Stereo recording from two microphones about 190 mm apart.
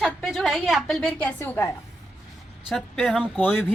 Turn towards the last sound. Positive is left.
turn(degrees=0)  # may be behind; listen again after turning